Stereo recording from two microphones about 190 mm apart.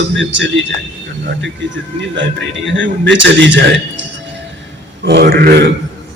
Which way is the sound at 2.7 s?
75° right (ahead or behind).